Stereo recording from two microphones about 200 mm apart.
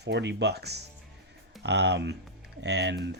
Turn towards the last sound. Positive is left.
turn(degrees=-60)  # may be behind; listen again after turning